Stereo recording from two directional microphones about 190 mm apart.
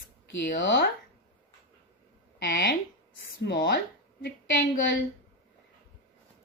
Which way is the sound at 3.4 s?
65° left (ahead or behind).